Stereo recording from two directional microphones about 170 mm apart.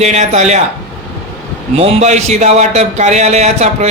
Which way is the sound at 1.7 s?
40° right (ahead or behind).